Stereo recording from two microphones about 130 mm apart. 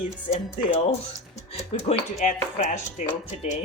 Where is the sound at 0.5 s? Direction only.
55° left (ahead or behind).